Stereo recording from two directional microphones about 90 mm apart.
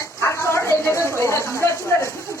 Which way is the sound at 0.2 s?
30° left (ahead or behind).